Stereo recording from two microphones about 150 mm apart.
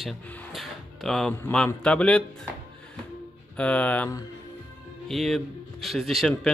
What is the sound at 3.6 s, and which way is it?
Speech, 10° left (ahead or behind).